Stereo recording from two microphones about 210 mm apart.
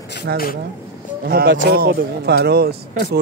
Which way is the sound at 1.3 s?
45° right (ahead or behind).